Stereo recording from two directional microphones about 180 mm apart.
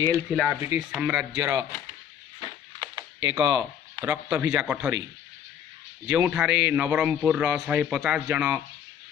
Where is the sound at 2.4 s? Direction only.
20° right (ahead or behind).